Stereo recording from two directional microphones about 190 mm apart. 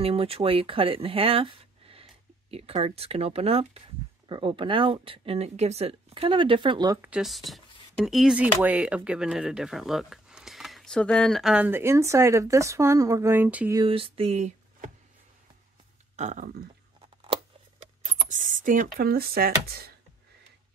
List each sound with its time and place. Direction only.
0.0 s speech: 30° right (ahead or behind)
7.0 s speech: 5° right (ahead or behind)
13.7 s speech: 30° right (ahead or behind)
16.2 s speech: 40° right (ahead or behind)
17.3 s a sound: 35° right (ahead or behind); by 19.9 s 55° right (ahead or behind)